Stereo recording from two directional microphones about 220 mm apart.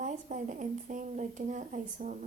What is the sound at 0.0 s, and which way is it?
Speech, 35° right (ahead or behind).